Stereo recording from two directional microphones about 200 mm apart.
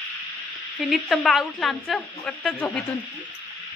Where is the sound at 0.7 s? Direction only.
Centre (ahead or behind).